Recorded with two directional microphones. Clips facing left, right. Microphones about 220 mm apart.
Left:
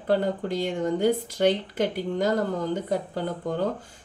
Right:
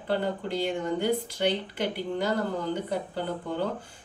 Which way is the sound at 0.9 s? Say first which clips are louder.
Left 4 dB; 45° left (ahead or behind).